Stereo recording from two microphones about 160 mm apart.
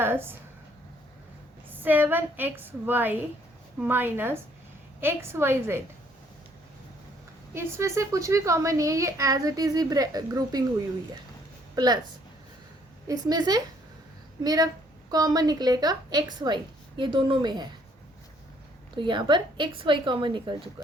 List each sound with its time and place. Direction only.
0.0 s a woman's voice: 15° right (ahead or behind)
1.7 s a woman's voice: 10° right (ahead or behind)
7.5 s a woman's voice: 20° right (ahead or behind)
11.7 s speech: 25° right (ahead or behind)
13.1 s a woman's voice: 25° right (ahead or behind)
18.9 s a woman's voice: 30° right (ahead or behind)